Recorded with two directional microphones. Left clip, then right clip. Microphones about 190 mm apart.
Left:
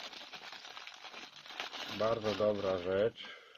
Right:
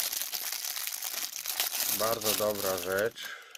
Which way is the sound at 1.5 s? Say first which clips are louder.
Right 6 dB; 20° right (ahead or behind).